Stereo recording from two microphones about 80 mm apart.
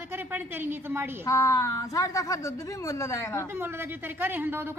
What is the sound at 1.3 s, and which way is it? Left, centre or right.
A woman's voice, left.